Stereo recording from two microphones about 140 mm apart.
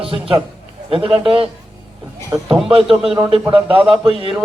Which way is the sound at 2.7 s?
45° right (ahead or behind).